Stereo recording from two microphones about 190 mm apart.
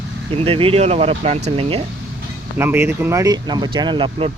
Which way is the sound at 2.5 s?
10° right (ahead or behind).